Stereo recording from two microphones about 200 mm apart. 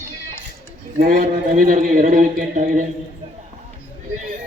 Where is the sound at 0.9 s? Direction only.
40° right (ahead or behind).